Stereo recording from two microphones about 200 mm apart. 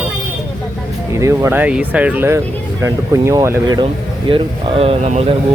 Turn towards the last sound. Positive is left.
turn(degrees=-30)  # may be behind; listen again after turning